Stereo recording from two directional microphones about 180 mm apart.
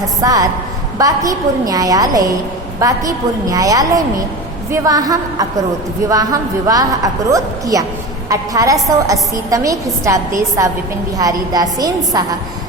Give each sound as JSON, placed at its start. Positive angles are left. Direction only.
{"t": 0.2, "sound": "a woman's voice", "side_deg": -20}